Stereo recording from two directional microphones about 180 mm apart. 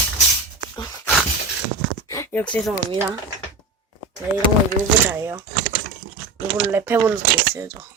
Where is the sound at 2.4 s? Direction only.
5° left (ahead or behind).